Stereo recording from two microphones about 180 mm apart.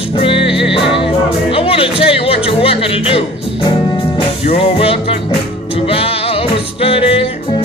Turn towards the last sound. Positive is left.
turn(degrees=30)  # may be behind; listen again after turning